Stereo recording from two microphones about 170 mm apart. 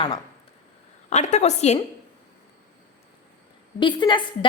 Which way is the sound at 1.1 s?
40° left (ahead or behind).